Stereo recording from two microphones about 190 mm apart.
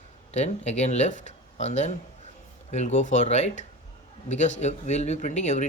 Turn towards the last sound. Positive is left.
turn(degrees=40)  # may be behind; listen again after turning